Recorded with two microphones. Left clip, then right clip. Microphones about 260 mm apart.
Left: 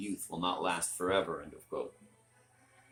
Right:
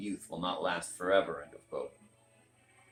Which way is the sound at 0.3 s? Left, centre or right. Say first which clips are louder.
Left 1 dB; left.